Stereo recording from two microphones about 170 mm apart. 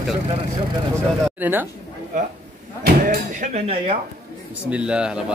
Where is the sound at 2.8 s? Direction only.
60° right (ahead or behind).